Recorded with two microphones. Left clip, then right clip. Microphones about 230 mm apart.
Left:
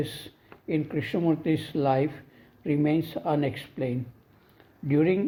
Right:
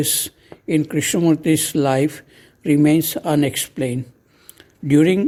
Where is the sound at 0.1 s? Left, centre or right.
Right.